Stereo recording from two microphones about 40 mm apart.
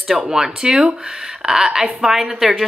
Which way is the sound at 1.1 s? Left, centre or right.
Centre.